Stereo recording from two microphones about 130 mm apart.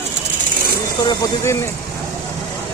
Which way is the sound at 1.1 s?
25° left (ahead or behind).